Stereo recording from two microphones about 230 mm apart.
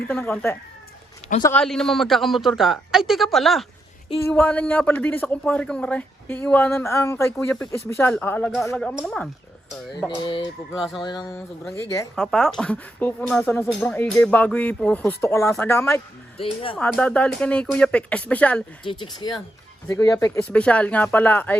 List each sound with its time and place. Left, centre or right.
0.1 s speech: centre
10.2 s speech: centre
12.1 s speech: centre
18.9 s speech: centre